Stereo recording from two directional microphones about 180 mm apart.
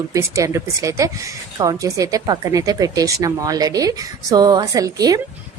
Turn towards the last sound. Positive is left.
turn(degrees=-20)  # may be behind; listen again after turning